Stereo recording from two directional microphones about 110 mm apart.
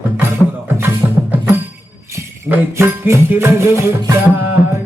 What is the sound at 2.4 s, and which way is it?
Music, 20° right (ahead or behind).